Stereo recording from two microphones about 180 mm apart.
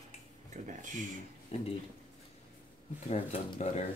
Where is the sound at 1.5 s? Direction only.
30° left (ahead or behind).